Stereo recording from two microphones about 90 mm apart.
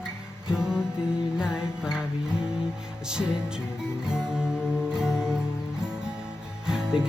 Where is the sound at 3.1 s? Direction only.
10° right (ahead or behind).